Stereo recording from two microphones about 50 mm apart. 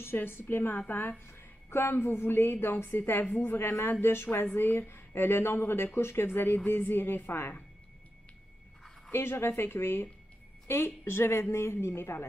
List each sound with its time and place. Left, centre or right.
0.0 s a woman's voice: left
1.2 s a woman's voice: left
9.1 s a woman's voice: left